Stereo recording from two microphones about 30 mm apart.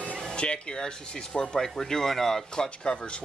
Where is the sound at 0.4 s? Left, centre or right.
Left; by 2.4 s centre.